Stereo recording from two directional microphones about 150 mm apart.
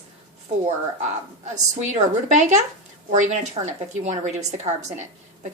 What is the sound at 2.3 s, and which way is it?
A woman's voice, 50° right (ahead or behind).